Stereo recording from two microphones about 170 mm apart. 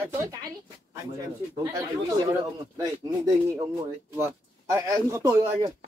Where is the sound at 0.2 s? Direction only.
20° right (ahead or behind).